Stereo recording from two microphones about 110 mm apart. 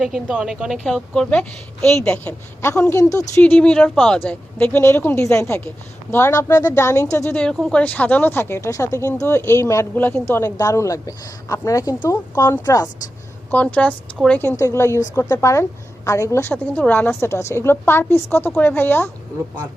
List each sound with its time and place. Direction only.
0.0 s a woman's voice: 5° right (ahead or behind); by 2.3 s 10° left (ahead or behind)
2.6 s speech: 25° left (ahead or behind)
3.4 s a woman's voice: 10° left (ahead or behind)
3.9 s a woman's voice: centre (ahead or behind)
4.2 s speech: 15° left (ahead or behind)
7.5 s speech: 5° left (ahead or behind); by 12.9 s 35° left (ahead or behind)
13.5 s a woman's voice: 10° left (ahead or behind)